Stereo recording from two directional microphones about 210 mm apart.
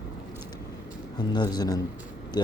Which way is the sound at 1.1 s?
20° left (ahead or behind).